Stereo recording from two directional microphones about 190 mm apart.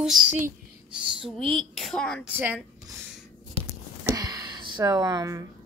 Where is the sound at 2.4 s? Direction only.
5° right (ahead or behind).